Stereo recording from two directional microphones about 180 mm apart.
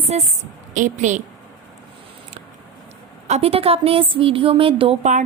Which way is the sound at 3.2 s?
35° right (ahead or behind).